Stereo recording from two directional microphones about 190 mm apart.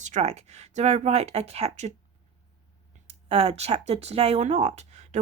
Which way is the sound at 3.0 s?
30° right (ahead or behind).